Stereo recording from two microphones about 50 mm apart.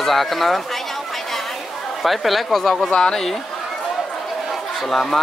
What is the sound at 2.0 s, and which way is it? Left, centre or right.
Speech, centre.